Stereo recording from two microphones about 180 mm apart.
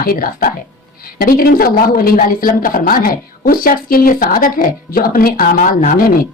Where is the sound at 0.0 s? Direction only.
55° left (ahead or behind).